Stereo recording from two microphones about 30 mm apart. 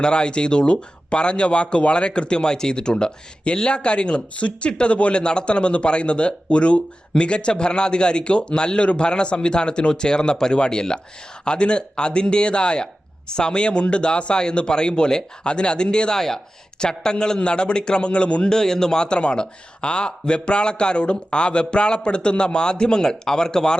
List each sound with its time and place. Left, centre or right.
0.0 s speech: left
5.2 s a man's voice: left
11.4 s speech: left
16.1 s speech: centre
16.8 s a man's voice: left
18.4 s speech: centre